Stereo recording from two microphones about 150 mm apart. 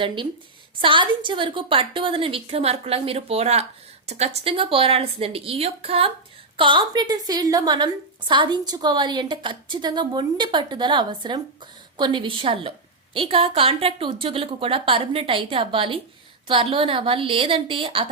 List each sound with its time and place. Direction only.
0.8 s a woman's voice: 35° right (ahead or behind)